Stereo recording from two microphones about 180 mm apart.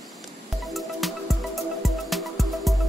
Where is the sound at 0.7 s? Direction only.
Centre (ahead or behind).